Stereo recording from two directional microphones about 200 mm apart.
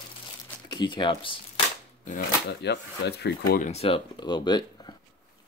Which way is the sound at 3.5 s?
35° left (ahead or behind).